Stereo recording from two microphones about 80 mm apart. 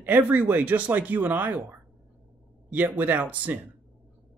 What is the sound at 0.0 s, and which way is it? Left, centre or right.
Speech, right.